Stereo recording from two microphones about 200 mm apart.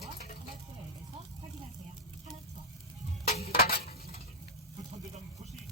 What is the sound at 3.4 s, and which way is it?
Tick-tock, 50° left (ahead or behind).